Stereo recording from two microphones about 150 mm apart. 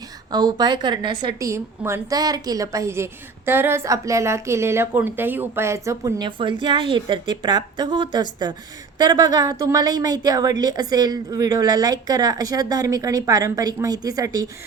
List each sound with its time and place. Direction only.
0.3 s a woman's voice: 30° right (ahead or behind)
1.4 s a woman's voice: 20° right (ahead or behind)